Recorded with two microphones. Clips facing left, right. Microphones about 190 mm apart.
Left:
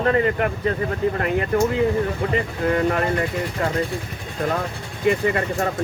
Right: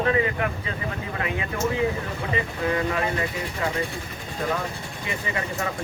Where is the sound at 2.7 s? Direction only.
50° left (ahead or behind).